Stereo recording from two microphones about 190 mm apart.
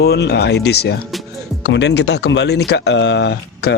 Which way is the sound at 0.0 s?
60° left (ahead or behind).